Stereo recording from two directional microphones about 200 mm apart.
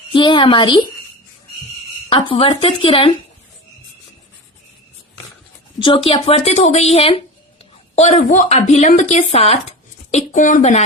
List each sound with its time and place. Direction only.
0.1 s a woman's voice: 25° left (ahead or behind)
2.0 s speech: 25° left (ahead or behind)
5.8 s a woman's voice: 25° left (ahead or behind)